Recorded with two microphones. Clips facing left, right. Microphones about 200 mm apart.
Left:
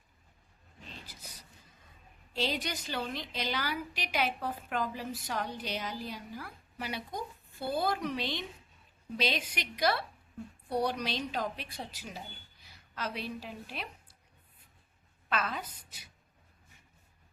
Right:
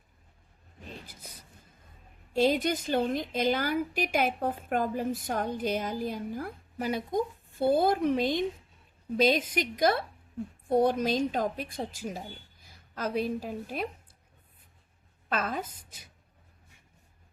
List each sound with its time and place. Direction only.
1.0 s a sound: 55° right (ahead or behind)
2.3 s a woman's voice: 50° right (ahead or behind)
15.3 s a woman's voice: 50° right (ahead or behind)